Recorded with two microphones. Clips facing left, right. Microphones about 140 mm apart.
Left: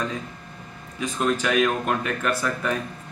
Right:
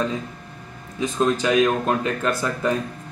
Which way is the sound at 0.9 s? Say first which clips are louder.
Right 3 dB; 20° right (ahead or behind).